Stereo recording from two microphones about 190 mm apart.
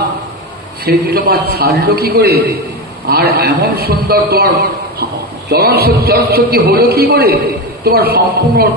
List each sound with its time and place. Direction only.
0.8 s a man's voice: 55° right (ahead or behind)